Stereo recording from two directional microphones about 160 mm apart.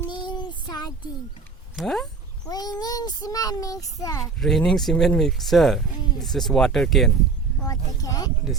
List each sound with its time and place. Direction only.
0.1 s child singing: 30° left (ahead or behind)
1.7 s speech: centre (ahead or behind)
2.5 s a child's voice: 25° left (ahead or behind)
4.4 s speech: centre (ahead or behind)
7.6 s a child's voice: 20° left (ahead or behind)